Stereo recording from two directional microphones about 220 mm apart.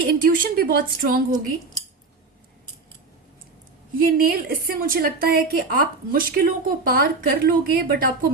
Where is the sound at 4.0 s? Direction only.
40° right (ahead or behind).